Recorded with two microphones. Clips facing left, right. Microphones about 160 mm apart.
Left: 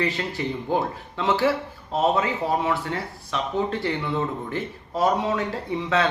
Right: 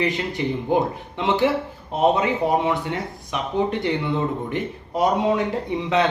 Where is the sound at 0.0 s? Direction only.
15° right (ahead or behind).